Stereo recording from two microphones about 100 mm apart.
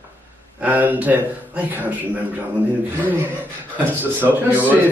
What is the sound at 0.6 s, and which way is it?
Speech, 15° right (ahead or behind).